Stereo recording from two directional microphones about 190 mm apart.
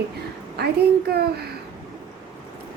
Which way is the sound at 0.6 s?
60° right (ahead or behind).